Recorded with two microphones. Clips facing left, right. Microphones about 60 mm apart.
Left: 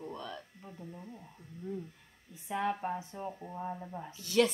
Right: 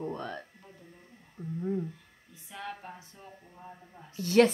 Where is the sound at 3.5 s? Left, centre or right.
Left.